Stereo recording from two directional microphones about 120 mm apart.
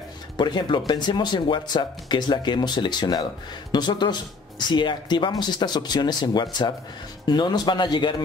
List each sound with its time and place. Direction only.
0.4 s speech: 40° left (ahead or behind)